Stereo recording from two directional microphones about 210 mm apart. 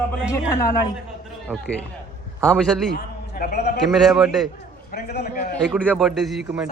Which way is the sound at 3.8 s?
Centre (ahead or behind).